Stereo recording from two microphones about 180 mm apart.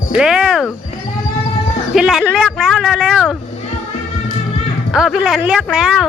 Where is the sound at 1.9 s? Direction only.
Centre (ahead or behind).